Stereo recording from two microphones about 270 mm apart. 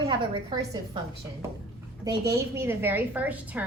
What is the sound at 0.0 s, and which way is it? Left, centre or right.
Speech, centre.